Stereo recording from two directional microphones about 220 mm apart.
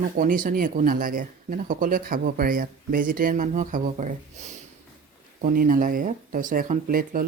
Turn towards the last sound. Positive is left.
turn(degrees=-40)  # may be behind; listen again after turning